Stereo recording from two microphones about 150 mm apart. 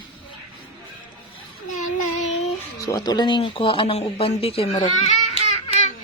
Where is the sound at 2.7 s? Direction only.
25° left (ahead or behind); by 5.9 s 45° left (ahead or behind).